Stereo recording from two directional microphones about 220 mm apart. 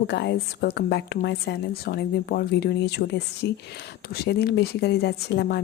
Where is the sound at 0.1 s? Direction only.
50° left (ahead or behind).